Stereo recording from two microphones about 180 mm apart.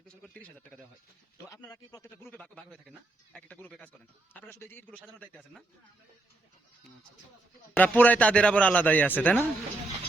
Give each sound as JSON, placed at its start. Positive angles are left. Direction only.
{"t": 0.2, "sound": "speech", "side_deg": 5}
{"t": 1.5, "sound": "speech", "side_deg": 20}
{"t": 2.3, "sound": "a man's voice", "side_deg": 5}
{"t": 7.8, "sound": "a man's voice", "side_deg": 10}